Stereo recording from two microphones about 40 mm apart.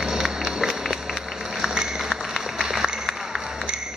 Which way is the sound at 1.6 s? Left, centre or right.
Centre.